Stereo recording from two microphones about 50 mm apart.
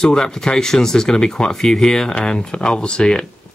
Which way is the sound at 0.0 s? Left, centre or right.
Centre.